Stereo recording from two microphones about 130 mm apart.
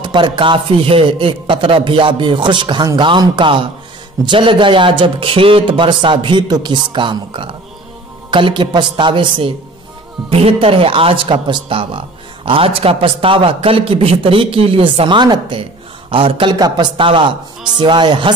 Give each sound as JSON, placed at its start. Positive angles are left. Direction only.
{"t": 0.0, "sound": "a man's voice", "side_deg": -35}
{"t": 16.5, "sound": "a man's voice", "side_deg": -30}